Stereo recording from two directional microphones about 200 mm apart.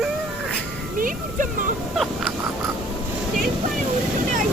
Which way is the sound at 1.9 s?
Centre (ahead or behind).